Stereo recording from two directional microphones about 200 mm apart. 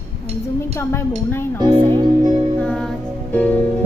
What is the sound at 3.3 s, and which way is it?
Speech, 5° left (ahead or behind).